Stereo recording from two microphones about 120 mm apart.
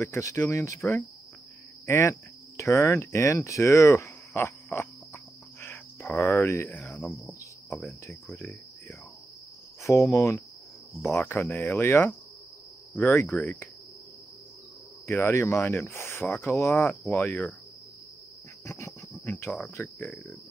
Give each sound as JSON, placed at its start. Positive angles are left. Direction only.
{"t": 0.0, "sound": "speech", "side_deg": 25}
{"t": 7.2, "sound": "cricket", "side_deg": 0}
{"t": 8.3, "sound": "cricket", "side_deg": 10}
{"t": 9.8, "sound": "speech", "side_deg": 25}
{"t": 15.0, "sound": "speech", "side_deg": 20}
{"t": 18.7, "sound": "a sound", "side_deg": 20}
{"t": 19.8, "sound": "speech", "side_deg": 5}